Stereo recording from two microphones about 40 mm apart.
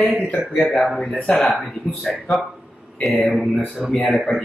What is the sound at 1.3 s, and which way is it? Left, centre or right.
Speech, centre.